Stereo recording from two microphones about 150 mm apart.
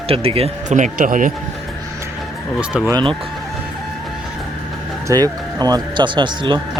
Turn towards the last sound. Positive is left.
turn(degrees=-30)  # may be behind; listen again after turning